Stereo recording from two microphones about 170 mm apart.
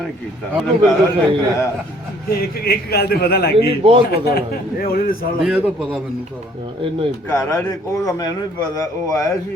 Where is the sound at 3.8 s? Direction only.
35° right (ahead or behind).